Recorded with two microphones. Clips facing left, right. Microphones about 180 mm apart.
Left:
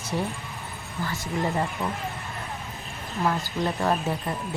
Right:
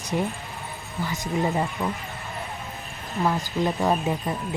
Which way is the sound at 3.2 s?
15° right (ahead or behind).